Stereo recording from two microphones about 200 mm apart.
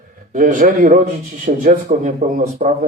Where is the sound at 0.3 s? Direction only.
40° right (ahead or behind).